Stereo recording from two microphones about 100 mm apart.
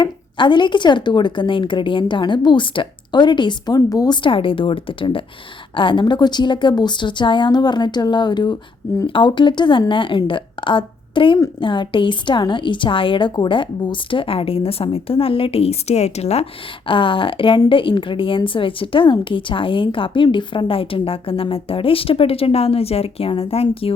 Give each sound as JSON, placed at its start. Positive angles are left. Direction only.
{"t": 0.0, "sound": "a woman's voice", "side_deg": 50}
{"t": 3.8, "sound": "a woman's voice", "side_deg": 40}